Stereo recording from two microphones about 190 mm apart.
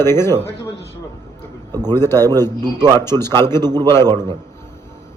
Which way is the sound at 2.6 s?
20° right (ahead or behind).